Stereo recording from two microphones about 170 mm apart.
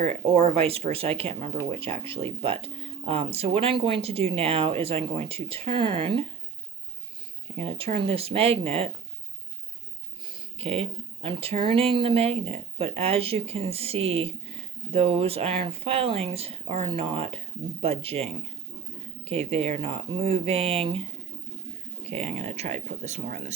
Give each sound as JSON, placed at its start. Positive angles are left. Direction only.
{"t": 0.3, "sound": "speech", "side_deg": -35}
{"t": 7.6, "sound": "speech", "side_deg": -35}
{"t": 10.2, "sound": "speech", "side_deg": -30}
{"t": 22.0, "sound": "a sound", "side_deg": -40}
{"t": 22.4, "sound": "speech", "side_deg": -40}